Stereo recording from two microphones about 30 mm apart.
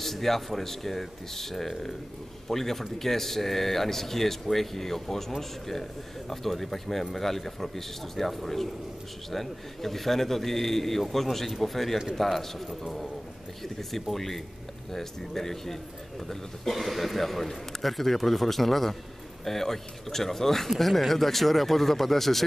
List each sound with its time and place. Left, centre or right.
0.0 s a man's voice: centre